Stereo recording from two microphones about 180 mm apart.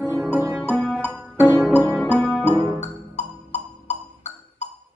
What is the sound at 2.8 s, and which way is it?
Music, 40° left (ahead or behind).